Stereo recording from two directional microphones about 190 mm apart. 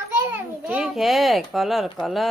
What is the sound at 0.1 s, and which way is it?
A child's voice, 10° right (ahead or behind).